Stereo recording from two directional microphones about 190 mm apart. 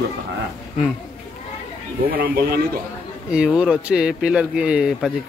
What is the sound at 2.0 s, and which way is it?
Speech, 50° right (ahead or behind).